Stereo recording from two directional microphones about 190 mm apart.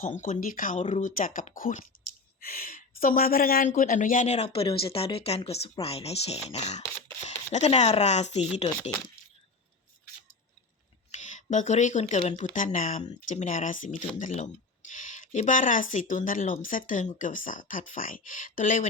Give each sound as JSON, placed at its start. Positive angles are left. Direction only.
{"t": 0.0, "sound": "speech", "side_deg": 40}
{"t": 11.1, "sound": "speech", "side_deg": 40}